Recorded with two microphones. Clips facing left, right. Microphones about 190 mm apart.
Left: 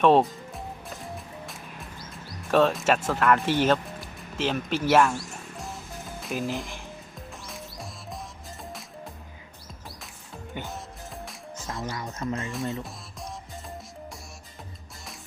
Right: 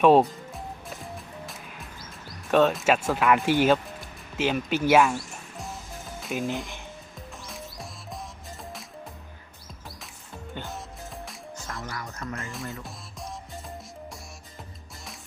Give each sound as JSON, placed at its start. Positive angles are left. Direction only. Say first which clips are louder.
{"t": 0.0, "sound": "speech", "louder": "right 2 dB", "side_deg": 0}
{"t": 0.9, "sound": "music", "louder": "left 1 dB", "side_deg": 0}
{"t": 2.5, "sound": "speech", "louder": "right 1 dB", "side_deg": 0}
{"t": 5.5, "sound": "music", "louder": "right 1 dB", "side_deg": 0}
{"t": 10.5, "sound": "music", "louder": "left 2 dB", "side_deg": 10}
{"t": 11.3, "sound": "music", "louder": "even", "side_deg": 0}
{"t": 11.7, "sound": "speech", "louder": "left 4 dB", "side_deg": 20}
{"t": 12.5, "sound": "speech", "louder": "left 5 dB", "side_deg": 0}
{"t": 12.8, "sound": "music", "louder": "left 1 dB", "side_deg": 0}